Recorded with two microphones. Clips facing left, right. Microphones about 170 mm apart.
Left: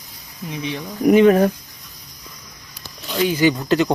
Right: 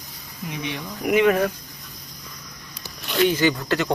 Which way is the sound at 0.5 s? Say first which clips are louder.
Left 4 dB; 30° left (ahead or behind).